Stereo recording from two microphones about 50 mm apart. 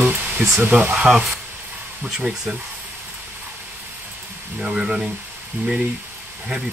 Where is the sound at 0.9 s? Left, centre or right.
Centre.